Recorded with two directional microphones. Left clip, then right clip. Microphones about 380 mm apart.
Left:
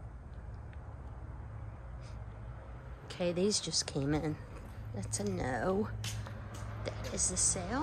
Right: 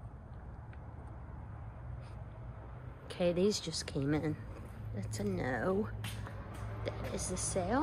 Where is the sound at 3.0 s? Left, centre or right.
Centre.